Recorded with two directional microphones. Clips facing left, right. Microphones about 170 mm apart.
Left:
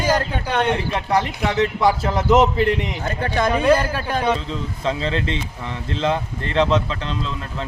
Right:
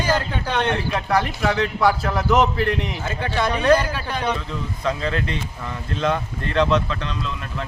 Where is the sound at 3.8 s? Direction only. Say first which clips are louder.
Left 3 dB; 45° left (ahead or behind).